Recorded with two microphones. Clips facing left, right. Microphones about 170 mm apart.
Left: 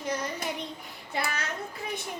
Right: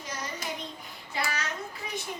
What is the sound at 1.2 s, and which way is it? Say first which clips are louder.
Speech: left 1 dB; 55° left (ahead or behind).